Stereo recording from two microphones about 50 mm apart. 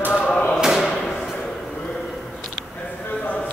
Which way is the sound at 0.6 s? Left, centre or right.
Centre.